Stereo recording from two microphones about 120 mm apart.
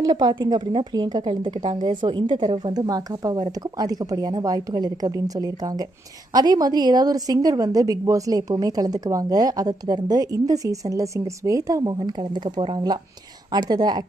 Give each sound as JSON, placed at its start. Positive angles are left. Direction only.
{"t": 0.0, "sound": "a woman's voice", "side_deg": -35}